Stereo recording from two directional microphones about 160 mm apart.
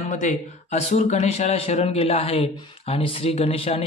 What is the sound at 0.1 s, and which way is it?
Speech, 50° left (ahead or behind).